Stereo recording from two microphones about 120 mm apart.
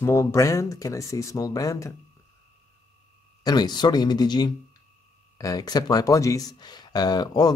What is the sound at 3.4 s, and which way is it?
Speech, 35° left (ahead or behind).